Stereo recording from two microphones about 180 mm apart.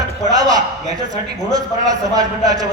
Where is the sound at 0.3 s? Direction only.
20° right (ahead or behind).